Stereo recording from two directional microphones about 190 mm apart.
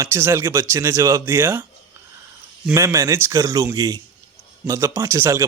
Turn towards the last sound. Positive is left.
turn(degrees=-15)  # may be behind; listen again after turning